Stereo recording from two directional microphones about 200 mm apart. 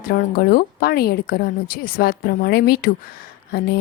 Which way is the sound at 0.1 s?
50° left (ahead or behind).